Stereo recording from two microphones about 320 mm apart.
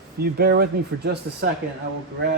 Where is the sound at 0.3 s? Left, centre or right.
Right.